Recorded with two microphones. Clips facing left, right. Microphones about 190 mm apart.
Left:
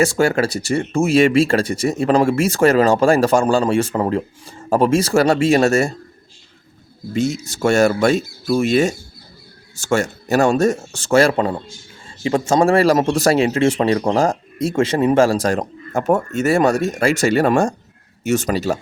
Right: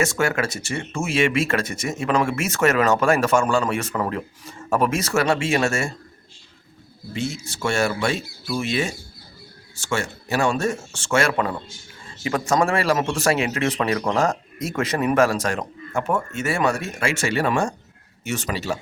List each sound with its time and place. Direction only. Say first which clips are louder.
0.0 s speech: left 6 dB; 30° left (ahead or behind)
7.1 s speech: left 8 dB; 40° left (ahead or behind)